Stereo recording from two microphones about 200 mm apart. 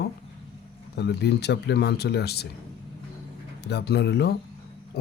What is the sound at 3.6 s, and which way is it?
Speech, 55° left (ahead or behind).